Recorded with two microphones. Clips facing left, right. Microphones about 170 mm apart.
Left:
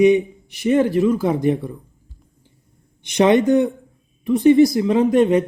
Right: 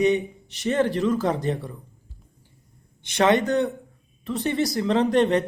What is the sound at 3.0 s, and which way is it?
Speech, 15° left (ahead or behind).